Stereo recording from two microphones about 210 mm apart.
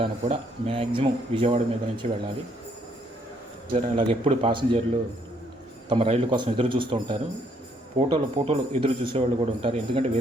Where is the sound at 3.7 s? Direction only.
25° right (ahead or behind).